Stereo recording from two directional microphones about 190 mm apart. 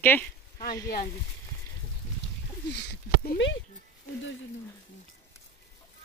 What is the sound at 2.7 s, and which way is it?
Speech, 55° left (ahead or behind).